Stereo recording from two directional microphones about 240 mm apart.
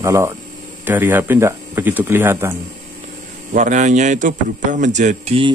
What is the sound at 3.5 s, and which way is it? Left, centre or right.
A man's voice, right.